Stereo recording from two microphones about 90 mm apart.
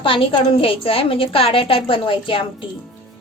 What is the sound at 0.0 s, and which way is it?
A woman's voice, 80° left.